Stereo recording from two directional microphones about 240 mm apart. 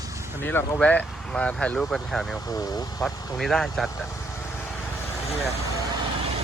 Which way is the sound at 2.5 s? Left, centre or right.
Centre.